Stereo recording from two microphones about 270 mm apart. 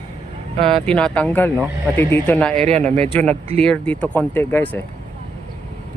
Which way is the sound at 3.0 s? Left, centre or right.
Right.